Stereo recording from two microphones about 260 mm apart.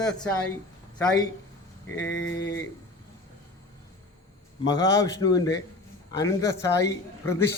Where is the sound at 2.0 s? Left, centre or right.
Left.